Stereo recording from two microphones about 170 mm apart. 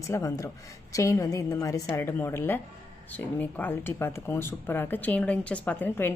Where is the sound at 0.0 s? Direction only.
20° left (ahead or behind).